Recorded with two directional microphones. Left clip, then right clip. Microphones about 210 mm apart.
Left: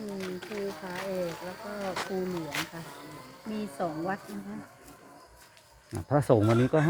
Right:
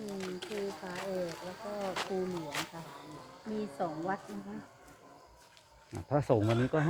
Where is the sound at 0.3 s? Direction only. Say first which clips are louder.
Left 2 dB; centre (ahead or behind).